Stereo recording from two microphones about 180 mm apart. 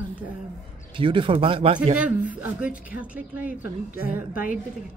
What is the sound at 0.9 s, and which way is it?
Speech, 30° right (ahead or behind).